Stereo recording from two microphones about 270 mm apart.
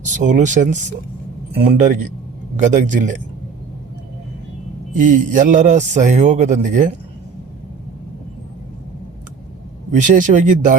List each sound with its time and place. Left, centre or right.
0.0 s a man's voice: right
4.9 s a man's voice: right
10.0 s a man's voice: right